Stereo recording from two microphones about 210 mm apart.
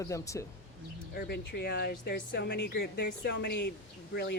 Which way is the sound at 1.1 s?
50° left (ahead or behind).